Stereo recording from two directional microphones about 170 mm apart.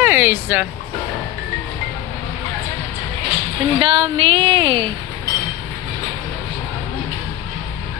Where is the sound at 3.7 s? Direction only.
35° right (ahead or behind).